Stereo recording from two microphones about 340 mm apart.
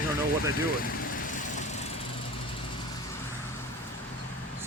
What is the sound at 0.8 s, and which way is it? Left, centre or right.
Vehicle, left.